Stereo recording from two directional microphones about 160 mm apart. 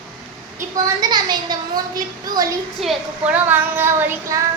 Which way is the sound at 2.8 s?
10° right (ahead or behind).